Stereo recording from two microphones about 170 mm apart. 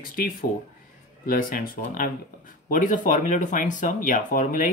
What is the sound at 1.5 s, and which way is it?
Speech, 55° left (ahead or behind).